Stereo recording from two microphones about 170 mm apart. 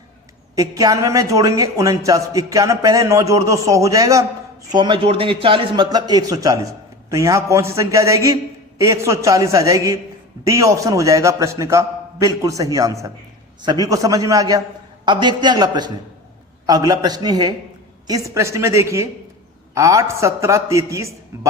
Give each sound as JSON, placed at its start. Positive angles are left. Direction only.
{"t": 0.5, "sound": "a man's voice", "side_deg": -20}